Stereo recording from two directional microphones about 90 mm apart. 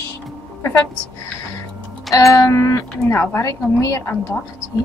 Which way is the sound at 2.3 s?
35° left (ahead or behind).